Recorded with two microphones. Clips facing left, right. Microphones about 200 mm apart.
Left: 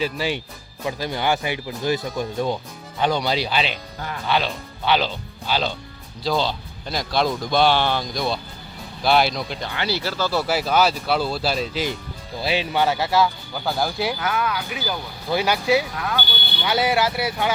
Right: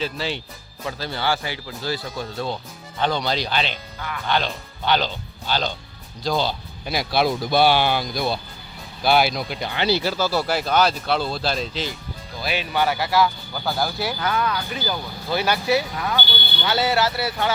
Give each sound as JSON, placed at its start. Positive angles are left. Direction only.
{"t": 0.0, "sound": "speech", "side_deg": 10}
{"t": 9.7, "sound": "speech", "side_deg": -20}
{"t": 10.4, "sound": "speech", "side_deg": 5}
{"t": 12.4, "sound": "speech", "side_deg": 25}
{"t": 13.7, "sound": "speech", "side_deg": 0}